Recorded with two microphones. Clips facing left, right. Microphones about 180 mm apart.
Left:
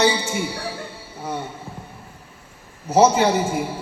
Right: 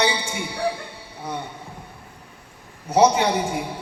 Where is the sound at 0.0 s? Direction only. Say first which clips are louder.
Left 4 dB; 5° left (ahead or behind).